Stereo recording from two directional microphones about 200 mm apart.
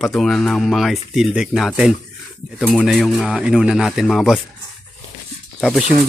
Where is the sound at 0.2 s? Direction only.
Centre (ahead or behind).